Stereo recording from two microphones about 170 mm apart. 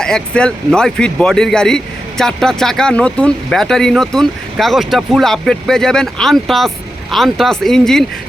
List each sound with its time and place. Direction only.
0.0 s speech: 5° left (ahead or behind)